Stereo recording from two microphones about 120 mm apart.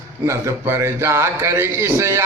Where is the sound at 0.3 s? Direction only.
20° right (ahead or behind).